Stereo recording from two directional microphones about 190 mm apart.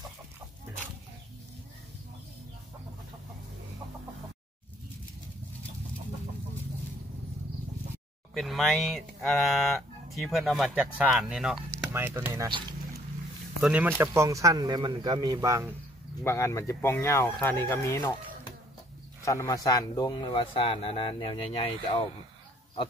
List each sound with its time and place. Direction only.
8.4 s speech: centre (ahead or behind); by 12.4 s 15° right (ahead or behind)
13.6 s speech: 5° right (ahead or behind)
16.3 s speech: 15° left (ahead or behind)
19.2 s speech: 15° left (ahead or behind)